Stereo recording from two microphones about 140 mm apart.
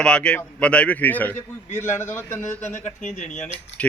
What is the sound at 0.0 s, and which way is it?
A man's voice, 5° left (ahead or behind).